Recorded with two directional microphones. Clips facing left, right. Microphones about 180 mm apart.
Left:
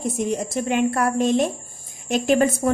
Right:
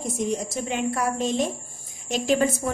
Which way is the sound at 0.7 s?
60° left (ahead or behind).